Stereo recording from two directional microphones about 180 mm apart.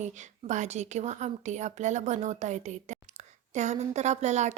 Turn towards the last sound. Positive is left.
turn(degrees=-40)  # may be behind; listen again after turning